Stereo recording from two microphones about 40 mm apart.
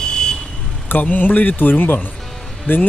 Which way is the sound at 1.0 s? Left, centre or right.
Left.